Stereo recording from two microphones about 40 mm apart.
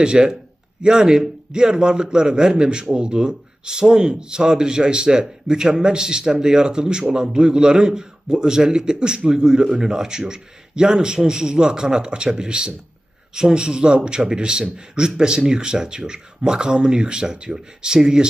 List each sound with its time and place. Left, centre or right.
0.0 s a man's voice: right